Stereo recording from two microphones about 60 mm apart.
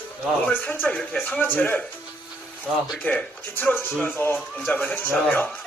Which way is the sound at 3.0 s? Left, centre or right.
Left.